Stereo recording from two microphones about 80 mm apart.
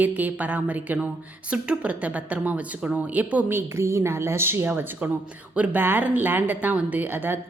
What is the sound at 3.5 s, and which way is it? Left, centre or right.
Speech, right.